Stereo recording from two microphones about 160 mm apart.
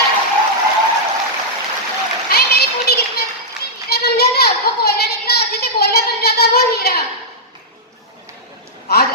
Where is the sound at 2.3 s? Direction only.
80° left.